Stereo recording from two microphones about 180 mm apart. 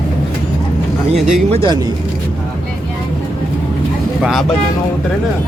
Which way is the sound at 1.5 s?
25° right (ahead or behind).